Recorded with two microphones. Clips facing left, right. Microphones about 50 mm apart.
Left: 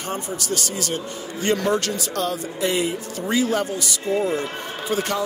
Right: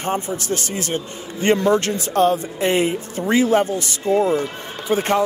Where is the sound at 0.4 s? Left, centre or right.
Right.